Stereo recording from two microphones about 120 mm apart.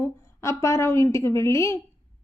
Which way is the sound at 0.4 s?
25° left (ahead or behind).